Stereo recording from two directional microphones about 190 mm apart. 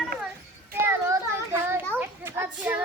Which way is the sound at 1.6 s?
10° right (ahead or behind).